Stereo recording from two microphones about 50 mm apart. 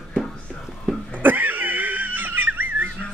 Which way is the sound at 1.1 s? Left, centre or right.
Right.